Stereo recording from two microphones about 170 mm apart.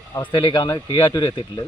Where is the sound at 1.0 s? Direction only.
15° left (ahead or behind).